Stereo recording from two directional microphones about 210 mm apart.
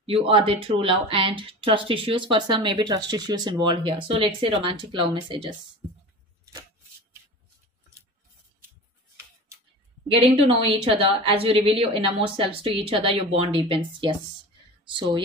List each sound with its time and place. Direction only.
0.0 s a woman's voice: 25° right (ahead or behind)
10.4 s a woman's voice: 25° right (ahead or behind)